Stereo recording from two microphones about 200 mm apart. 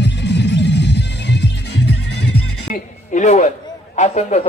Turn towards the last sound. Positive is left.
turn(degrees=35)  # may be behind; listen again after turning